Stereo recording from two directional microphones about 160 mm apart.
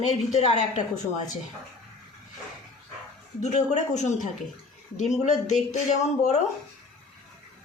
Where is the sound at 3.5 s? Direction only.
45° left (ahead or behind).